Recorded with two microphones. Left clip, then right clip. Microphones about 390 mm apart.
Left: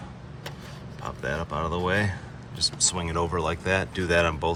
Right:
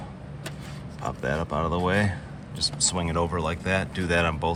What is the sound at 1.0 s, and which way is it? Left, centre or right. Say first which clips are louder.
Speech: right 2 dB; centre.